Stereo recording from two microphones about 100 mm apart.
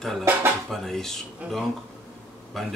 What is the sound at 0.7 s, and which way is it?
Speech, 5° left (ahead or behind).